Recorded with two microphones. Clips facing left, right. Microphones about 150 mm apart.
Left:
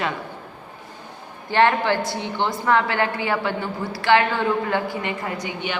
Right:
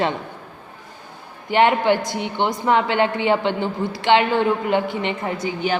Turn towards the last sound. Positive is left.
turn(degrees=-35)  # may be behind; listen again after turning